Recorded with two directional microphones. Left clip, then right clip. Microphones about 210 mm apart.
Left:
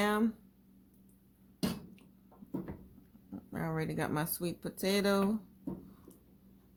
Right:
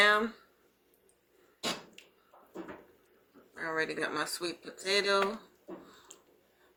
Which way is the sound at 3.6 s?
50° left (ahead or behind).